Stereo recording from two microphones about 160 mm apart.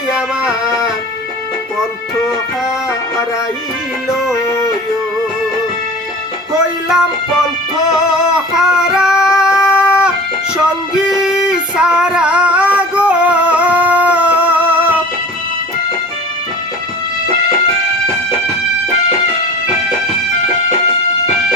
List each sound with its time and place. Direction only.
0.1 s music: 5° right (ahead or behind)
4.4 s music: 20° left (ahead or behind)
6.5 s music: 5° right (ahead or behind)
7.9 s female singing: 5° right (ahead or behind)
11.1 s music: 5° right (ahead or behind)